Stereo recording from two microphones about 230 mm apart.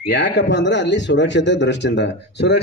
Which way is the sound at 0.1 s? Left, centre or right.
Left.